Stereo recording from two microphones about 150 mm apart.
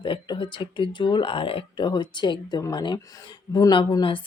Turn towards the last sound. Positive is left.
turn(degrees=35)  # may be behind; listen again after turning